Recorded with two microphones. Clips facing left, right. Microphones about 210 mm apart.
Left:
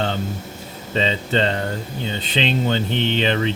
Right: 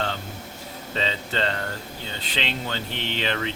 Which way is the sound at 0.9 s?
20° left (ahead or behind).